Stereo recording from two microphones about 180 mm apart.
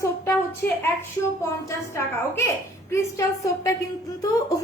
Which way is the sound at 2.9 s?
15° left (ahead or behind).